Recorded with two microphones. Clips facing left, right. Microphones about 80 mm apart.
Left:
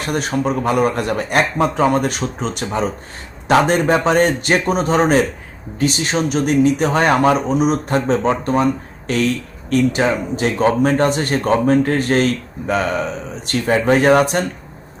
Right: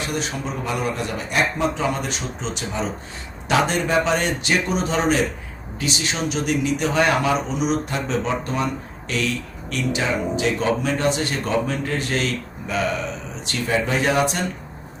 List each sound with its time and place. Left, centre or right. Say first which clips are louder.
0.1 s speech: left 8 dB; left